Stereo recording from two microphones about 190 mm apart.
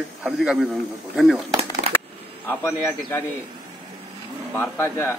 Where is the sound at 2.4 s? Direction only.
10° left (ahead or behind).